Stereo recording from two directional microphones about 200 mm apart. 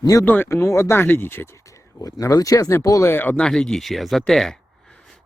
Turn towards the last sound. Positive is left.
turn(degrees=5)  # may be behind; listen again after turning